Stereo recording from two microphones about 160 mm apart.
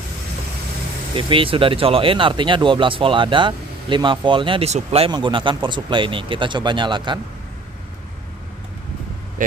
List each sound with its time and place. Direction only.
1.1 s speech: 35° right (ahead or behind)
5.1 s speech: 30° right (ahead or behind)